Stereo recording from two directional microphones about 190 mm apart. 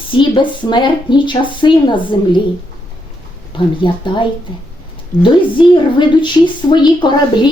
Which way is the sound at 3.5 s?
25° left (ahead or behind).